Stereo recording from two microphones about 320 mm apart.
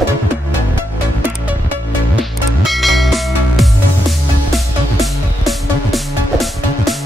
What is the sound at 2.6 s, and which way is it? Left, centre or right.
Music, centre.